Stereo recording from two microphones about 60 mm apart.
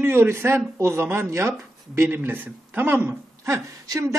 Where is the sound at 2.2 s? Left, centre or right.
Right.